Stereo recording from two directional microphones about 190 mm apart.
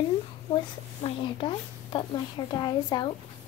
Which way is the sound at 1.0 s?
25° left (ahead or behind).